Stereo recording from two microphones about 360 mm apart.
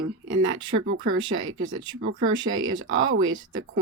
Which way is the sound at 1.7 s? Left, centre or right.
Centre.